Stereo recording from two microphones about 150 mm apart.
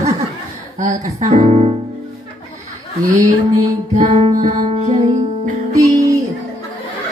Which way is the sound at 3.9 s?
50° right (ahead or behind).